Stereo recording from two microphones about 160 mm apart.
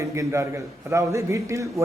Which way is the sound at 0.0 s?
20° right (ahead or behind).